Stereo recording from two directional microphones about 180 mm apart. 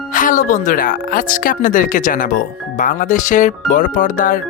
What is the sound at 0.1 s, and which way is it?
Speech, 45° left (ahead or behind).